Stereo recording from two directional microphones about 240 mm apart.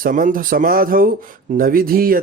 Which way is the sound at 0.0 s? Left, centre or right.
Right.